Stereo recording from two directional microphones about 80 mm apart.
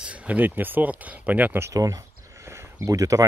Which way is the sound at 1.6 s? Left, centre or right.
Right.